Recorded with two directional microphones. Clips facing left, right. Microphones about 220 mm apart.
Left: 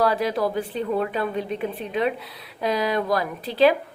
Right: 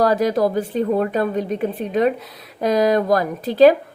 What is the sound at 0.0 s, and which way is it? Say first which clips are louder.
A woman's voice: right 5 dB; 45° right (ahead or behind).